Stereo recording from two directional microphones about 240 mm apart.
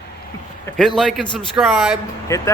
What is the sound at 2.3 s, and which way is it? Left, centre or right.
Speech, centre.